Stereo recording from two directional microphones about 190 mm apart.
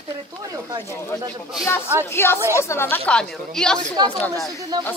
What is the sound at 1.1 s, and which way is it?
Speech, 10° left (ahead or behind).